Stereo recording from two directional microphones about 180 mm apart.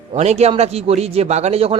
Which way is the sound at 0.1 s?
35° right (ahead or behind).